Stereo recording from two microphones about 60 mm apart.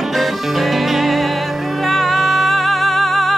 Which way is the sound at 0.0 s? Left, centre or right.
Centre.